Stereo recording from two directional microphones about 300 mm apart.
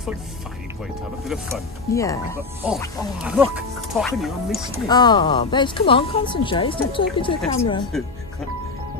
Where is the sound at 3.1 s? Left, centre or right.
Centre.